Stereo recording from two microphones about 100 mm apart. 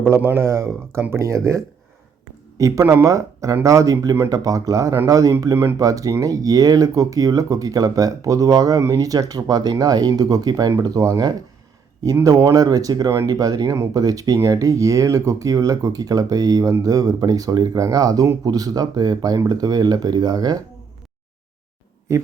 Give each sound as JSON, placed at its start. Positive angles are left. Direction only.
{"t": 0.1, "sound": "speech", "side_deg": -25}